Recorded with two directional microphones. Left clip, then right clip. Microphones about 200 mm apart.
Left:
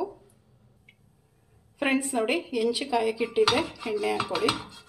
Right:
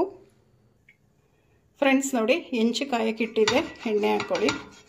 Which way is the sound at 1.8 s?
40° right (ahead or behind).